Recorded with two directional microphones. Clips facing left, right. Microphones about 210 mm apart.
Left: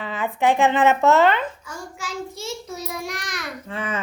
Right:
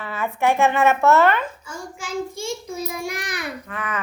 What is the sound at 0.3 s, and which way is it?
Speech, 15° left (ahead or behind).